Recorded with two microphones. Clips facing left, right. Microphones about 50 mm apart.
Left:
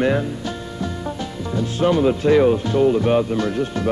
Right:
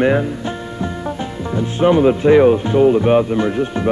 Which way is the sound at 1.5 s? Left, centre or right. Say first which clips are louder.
Right 4 dB; right.